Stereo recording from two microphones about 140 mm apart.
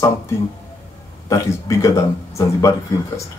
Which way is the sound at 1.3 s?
20° left (ahead or behind).